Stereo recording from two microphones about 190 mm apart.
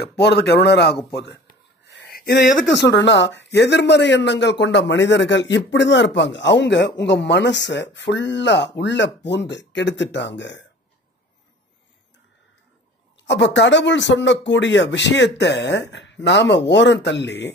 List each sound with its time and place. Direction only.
0.0 s speech: 60° left (ahead or behind)
2.0 s a sound: 55° left (ahead or behind)
2.7 s speech: 65° left (ahead or behind)
13.2 s speech: 70° left (ahead or behind)